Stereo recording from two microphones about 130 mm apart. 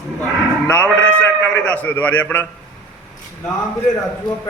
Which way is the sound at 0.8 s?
15° right (ahead or behind).